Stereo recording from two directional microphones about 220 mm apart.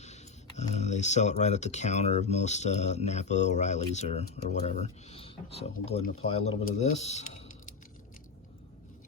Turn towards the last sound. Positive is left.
turn(degrees=30)  # may be behind; listen again after turning